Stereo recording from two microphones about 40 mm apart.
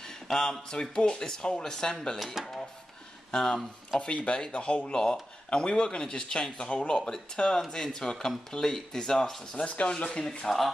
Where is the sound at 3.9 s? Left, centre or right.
Left; by 9.4 s centre.